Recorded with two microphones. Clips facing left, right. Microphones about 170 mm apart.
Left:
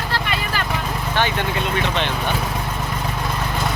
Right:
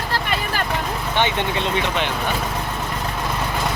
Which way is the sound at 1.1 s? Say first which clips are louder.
Right 1 dB; 20° right (ahead or behind).